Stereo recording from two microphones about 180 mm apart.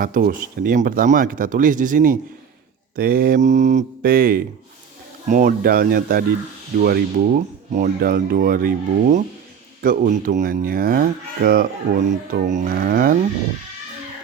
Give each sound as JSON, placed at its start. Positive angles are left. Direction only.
{"t": 0.0, "sound": "speech", "side_deg": -55}
{"t": 12.7, "sound": "music", "side_deg": -65}